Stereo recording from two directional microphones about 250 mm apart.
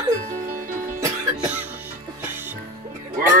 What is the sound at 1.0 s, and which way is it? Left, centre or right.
Music, centre.